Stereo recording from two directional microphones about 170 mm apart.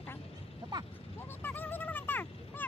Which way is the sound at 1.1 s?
10° left (ahead or behind).